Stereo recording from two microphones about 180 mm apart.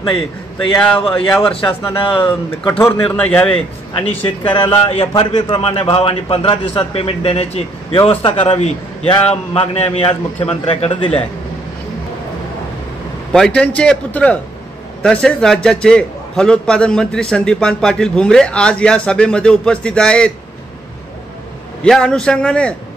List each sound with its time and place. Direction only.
0.7 s a man's voice: 10° left (ahead or behind)
2.0 s a man's voice: 30° left (ahead or behind)
2.8 s a man's voice: 15° left (ahead or behind)
4.6 s a man's voice: 35° left (ahead or behind)
13.3 s a man's voice: 5° left (ahead or behind)
21.8 s a man's voice: 5° left (ahead or behind)